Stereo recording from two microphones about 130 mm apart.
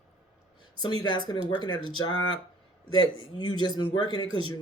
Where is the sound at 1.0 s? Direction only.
35° left (ahead or behind).